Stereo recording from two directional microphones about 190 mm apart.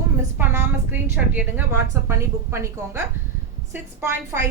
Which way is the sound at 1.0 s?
10° right (ahead or behind).